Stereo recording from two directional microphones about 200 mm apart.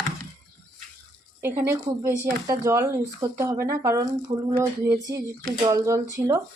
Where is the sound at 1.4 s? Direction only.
10° right (ahead or behind).